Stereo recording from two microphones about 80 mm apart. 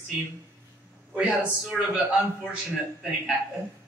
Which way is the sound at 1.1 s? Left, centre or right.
Centre.